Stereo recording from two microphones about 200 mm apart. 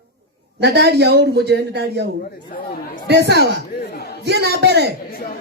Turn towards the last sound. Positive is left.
turn(degrees=-55)  # may be behind; listen again after turning